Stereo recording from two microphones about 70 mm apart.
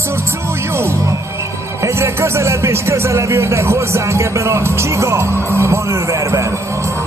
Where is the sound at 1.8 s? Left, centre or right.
Right.